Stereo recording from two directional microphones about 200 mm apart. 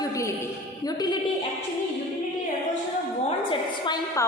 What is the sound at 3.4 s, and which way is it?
Speech, 25° left (ahead or behind).